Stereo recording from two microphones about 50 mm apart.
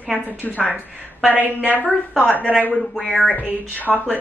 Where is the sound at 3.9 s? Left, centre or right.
Centre.